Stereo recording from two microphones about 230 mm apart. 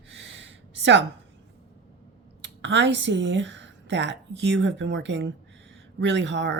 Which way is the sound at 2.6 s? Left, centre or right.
Right.